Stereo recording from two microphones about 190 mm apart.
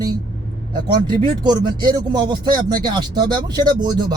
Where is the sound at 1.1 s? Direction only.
20° right (ahead or behind).